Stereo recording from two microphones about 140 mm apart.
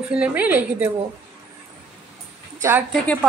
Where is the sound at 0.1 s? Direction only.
10° right (ahead or behind).